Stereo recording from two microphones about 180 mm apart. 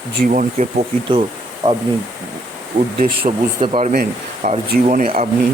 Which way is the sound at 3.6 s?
30° right (ahead or behind).